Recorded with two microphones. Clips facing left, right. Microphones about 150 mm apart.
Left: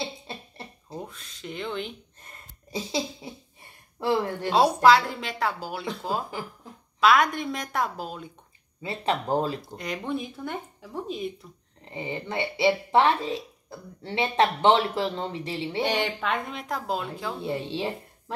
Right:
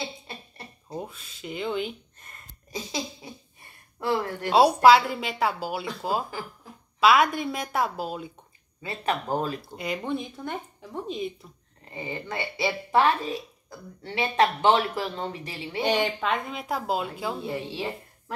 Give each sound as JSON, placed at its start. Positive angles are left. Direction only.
{"t": 0.8, "sound": "speech", "side_deg": -5}
{"t": 2.7, "sound": "a woman's voice", "side_deg": 25}
{"t": 4.5, "sound": "a woman's voice", "side_deg": -5}
{"t": 7.0, "sound": "speech", "side_deg": -5}
{"t": 8.8, "sound": "a woman's voice", "side_deg": 25}
{"t": 9.8, "sound": "speech", "side_deg": 0}
{"t": 11.8, "sound": "a woman's voice", "side_deg": 20}
{"t": 15.8, "sound": "speech", "side_deg": 0}
{"t": 17.4, "sound": "a woman's voice", "side_deg": 25}